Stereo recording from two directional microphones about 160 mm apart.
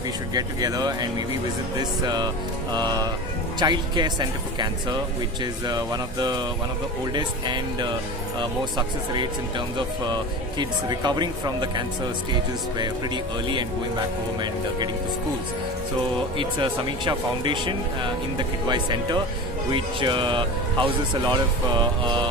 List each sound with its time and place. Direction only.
0.3 s speech: 25° right (ahead or behind)
16.3 s speech: 30° right (ahead or behind)